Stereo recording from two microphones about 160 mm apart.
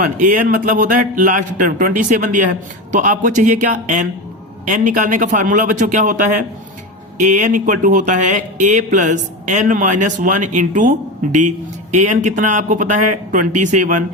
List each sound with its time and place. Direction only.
0.0 s a man's voice: 55° right (ahead or behind)